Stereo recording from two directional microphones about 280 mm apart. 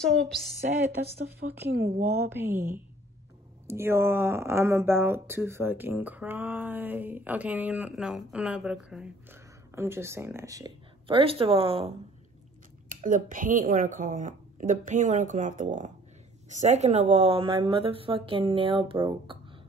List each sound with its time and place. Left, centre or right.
0.0 s a woman's voice: centre
1.0 s speech: right
2.2 s speech: centre